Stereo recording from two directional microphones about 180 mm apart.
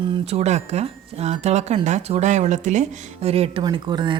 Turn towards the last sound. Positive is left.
turn(degrees=-25)  # may be behind; listen again after turning